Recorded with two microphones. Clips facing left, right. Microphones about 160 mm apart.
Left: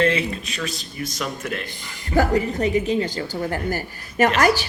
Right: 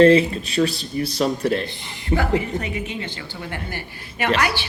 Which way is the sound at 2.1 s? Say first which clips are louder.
Left 2 dB; 40° left (ahead or behind).